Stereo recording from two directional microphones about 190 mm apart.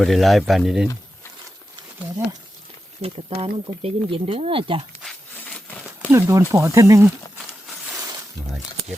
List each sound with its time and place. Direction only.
0.0 s speech: centre (ahead or behind)
3.0 s speech: 30° right (ahead or behind)
6.1 s speech: 15° right (ahead or behind)